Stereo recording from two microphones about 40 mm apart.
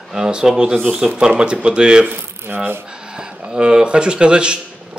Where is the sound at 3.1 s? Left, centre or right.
Right.